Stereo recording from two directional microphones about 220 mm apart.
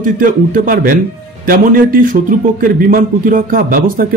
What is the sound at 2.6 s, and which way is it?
A man's voice, 40° right (ahead or behind).